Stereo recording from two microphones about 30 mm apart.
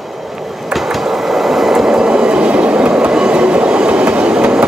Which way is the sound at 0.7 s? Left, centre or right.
Centre.